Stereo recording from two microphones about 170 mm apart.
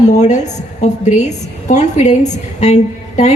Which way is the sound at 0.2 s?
45° left (ahead or behind).